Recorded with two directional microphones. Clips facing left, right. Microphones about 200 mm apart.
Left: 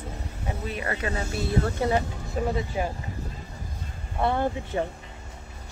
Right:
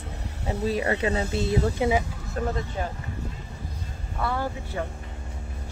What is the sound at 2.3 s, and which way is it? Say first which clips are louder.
Speech: left 2 dB; 5° left (ahead or behind).